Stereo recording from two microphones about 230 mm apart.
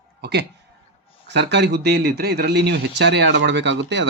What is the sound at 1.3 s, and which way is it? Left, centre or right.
A man's voice, right.